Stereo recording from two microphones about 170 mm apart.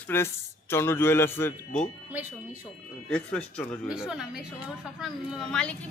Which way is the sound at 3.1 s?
5° left (ahead or behind).